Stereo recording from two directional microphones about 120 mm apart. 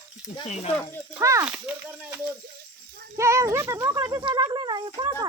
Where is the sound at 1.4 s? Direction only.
10° right (ahead or behind).